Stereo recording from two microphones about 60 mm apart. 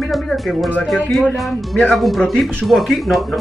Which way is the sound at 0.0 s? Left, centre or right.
Centre.